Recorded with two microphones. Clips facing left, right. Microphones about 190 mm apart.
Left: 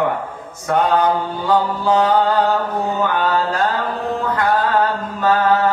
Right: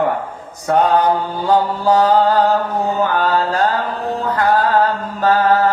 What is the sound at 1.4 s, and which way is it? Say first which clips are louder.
Mantra: right 2 dB; 35° right (ahead or behind).